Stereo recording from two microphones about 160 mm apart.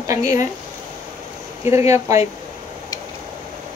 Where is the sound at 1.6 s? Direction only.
20° right (ahead or behind).